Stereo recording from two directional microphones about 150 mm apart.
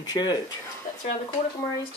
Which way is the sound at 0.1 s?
25° left (ahead or behind).